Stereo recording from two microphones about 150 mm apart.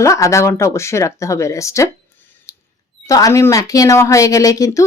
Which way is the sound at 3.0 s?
20° left (ahead or behind).